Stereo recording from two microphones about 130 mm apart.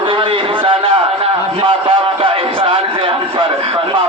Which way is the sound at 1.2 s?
40° right (ahead or behind).